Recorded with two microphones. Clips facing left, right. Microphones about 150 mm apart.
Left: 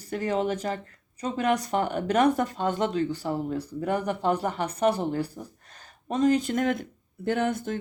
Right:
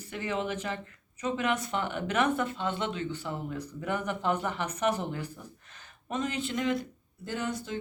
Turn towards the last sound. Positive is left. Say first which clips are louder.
# left 7 dB
turn(degrees=55)  # may be behind; listen again after turning